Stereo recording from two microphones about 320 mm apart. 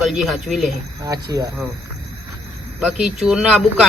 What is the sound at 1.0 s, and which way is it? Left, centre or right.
Speech, centre.